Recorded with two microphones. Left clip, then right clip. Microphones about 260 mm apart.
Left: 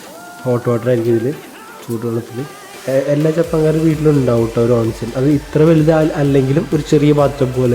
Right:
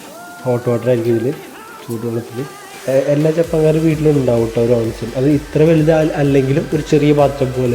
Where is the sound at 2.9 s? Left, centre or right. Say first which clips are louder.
Right 1 dB; centre.